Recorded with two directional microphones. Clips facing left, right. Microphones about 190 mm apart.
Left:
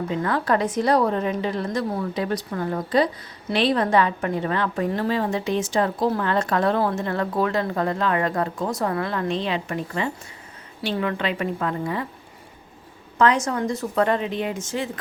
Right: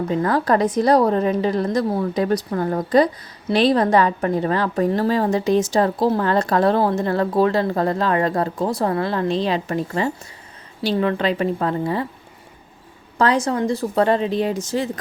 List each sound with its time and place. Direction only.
0.1 s a woman's voice: 40° right (ahead or behind)
13.1 s a woman's voice: 35° right (ahead or behind)